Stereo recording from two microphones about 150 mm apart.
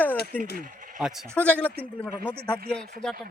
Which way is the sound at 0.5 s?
65° right (ahead or behind).